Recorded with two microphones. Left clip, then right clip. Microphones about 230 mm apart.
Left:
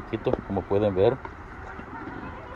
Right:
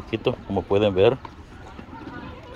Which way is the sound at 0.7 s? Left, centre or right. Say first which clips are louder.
Right 4 dB; centre.